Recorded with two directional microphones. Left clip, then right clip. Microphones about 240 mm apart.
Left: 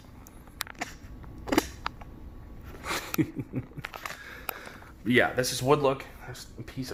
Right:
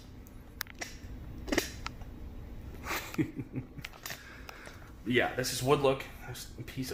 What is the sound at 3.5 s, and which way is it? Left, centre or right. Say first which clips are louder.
Speech: left 5 dB; left.